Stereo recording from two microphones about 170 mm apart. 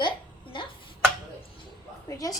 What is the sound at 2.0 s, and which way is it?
Speech, 20° left (ahead or behind).